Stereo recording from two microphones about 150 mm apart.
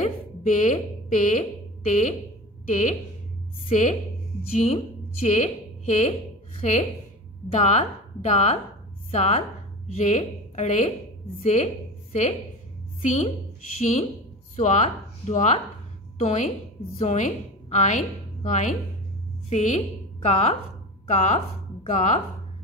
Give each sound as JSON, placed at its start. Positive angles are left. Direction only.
{"t": 0.0, "sound": "a sound", "side_deg": 55}
{"t": 1.1, "sound": "a woman's voice", "side_deg": 60}
{"t": 4.6, "sound": "a woman's voice", "side_deg": 50}